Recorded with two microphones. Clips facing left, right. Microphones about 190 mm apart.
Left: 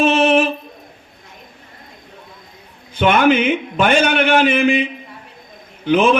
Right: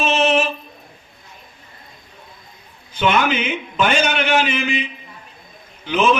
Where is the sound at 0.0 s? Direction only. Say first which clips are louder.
Left 4 dB; 55° left (ahead or behind).